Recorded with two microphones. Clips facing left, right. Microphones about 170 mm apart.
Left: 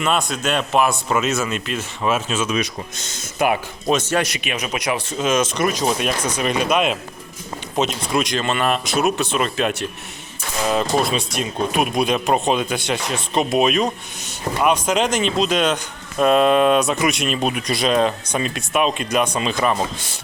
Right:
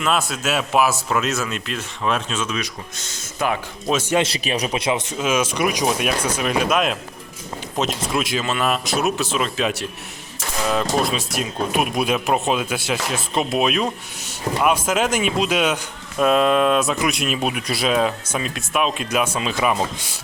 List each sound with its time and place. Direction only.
0.0 s speech: centre (ahead or behind)
2.6 s speech: 20° left (ahead or behind)
3.9 s speech: 10° right (ahead or behind)
4.2 s speech: 30° right (ahead or behind)
5.1 s speech: 10° right (ahead or behind)